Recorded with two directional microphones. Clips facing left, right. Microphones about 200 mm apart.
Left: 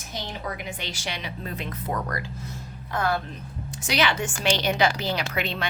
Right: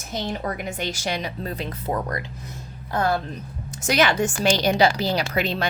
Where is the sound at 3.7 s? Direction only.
45° right (ahead or behind).